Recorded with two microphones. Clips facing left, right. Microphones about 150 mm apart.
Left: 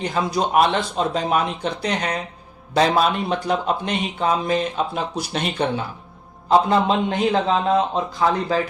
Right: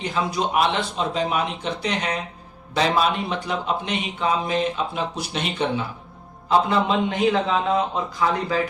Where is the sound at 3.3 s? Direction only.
40° left (ahead or behind).